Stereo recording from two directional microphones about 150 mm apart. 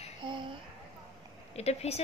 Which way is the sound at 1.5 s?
45° left (ahead or behind).